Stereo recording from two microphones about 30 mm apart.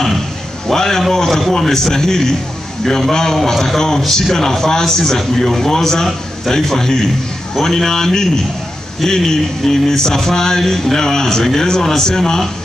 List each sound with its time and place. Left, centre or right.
0.7 s a man's voice: centre